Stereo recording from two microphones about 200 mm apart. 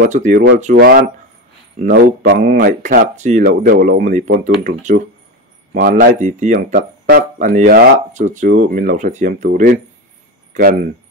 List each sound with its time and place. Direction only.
0.0 s speech: 40° right (ahead or behind)
2.3 s speech: 45° right (ahead or behind)